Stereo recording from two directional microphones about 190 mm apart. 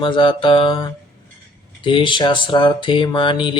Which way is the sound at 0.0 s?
25° left (ahead or behind).